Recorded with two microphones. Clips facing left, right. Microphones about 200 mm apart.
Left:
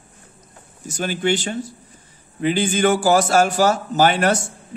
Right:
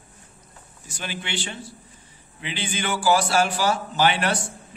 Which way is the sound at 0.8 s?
45° left (ahead or behind).